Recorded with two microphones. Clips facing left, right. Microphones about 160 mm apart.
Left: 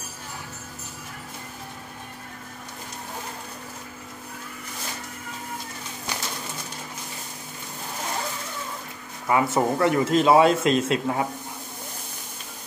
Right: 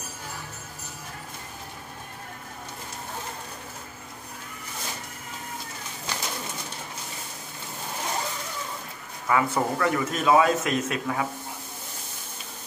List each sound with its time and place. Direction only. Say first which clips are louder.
6.1 s bird: left 1 dB; 10° left (ahead or behind)
9.3 s speech: left 3 dB; 25° left (ahead or behind)